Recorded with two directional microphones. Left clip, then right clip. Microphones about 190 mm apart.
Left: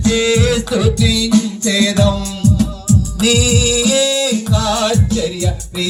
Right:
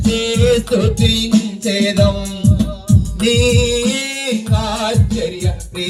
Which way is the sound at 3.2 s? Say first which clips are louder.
Even; 20° left (ahead or behind).